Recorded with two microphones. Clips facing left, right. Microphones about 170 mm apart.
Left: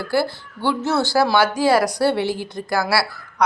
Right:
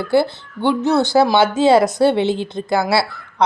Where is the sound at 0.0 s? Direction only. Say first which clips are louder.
Right 5 dB; 20° right (ahead or behind).